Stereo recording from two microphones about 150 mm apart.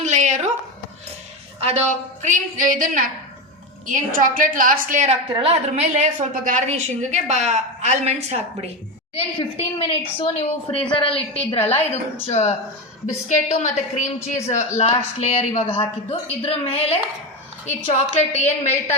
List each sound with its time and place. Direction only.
0.0 s a sound: 55° right (ahead or behind)
1.5 s a woman's voice: 45° right (ahead or behind)
5.3 s a woman's voice: 40° right (ahead or behind)
9.1 s a woman's voice: 40° left (ahead or behind)
11.7 s a woman's voice: 45° left (ahead or behind)
18.2 s speech: 45° left (ahead or behind)